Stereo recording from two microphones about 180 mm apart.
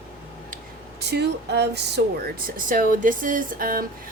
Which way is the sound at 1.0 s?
65° right (ahead or behind).